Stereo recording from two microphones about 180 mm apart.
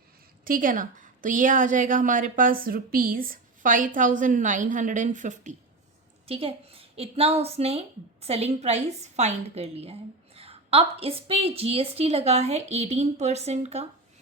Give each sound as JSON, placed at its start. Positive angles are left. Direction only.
{"t": 0.4, "sound": "a woman's voice", "side_deg": -50}
{"t": 6.2, "sound": "a woman's voice", "side_deg": -30}